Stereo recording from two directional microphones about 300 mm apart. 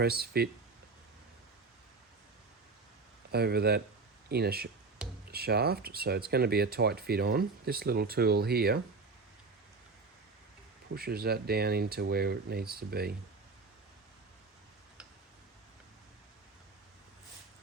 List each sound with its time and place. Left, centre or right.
0.0 s speech: right
3.3 s speech: right
10.9 s speech: right